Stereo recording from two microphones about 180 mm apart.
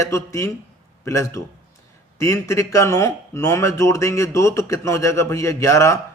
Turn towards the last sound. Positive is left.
turn(degrees=15)  # may be behind; listen again after turning